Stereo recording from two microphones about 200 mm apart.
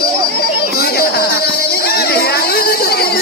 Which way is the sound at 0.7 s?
50° left (ahead or behind).